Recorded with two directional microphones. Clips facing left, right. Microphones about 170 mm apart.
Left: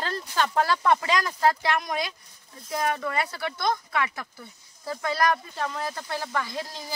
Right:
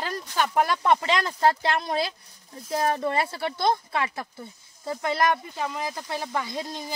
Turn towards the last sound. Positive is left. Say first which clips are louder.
# right 2 dB
turn(degrees=-20)  # may be behind; listen again after turning